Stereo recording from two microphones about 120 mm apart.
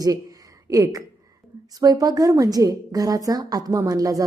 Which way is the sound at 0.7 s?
30° right (ahead or behind).